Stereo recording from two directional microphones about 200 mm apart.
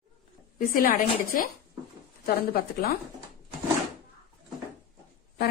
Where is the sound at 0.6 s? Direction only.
45° left (ahead or behind).